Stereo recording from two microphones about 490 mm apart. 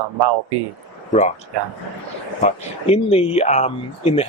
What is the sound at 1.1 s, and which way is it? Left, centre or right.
Speech, centre.